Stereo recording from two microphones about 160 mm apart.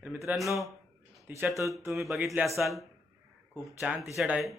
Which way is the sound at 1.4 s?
15° right (ahead or behind).